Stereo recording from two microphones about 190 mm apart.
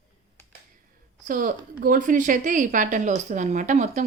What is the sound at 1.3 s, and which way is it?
A woman's voice, 45° right (ahead or behind).